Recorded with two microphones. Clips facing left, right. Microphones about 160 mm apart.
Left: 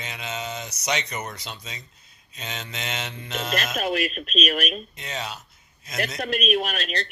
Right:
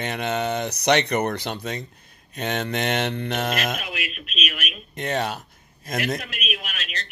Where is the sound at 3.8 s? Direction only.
40° left (ahead or behind).